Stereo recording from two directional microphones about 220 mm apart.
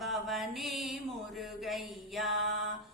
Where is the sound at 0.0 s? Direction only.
Centre (ahead or behind).